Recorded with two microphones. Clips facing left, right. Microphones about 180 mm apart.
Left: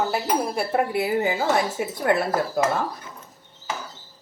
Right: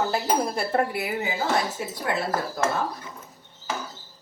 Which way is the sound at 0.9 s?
30° left (ahead or behind).